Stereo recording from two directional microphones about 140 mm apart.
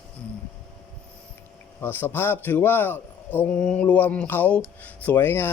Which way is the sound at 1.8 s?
15° left (ahead or behind).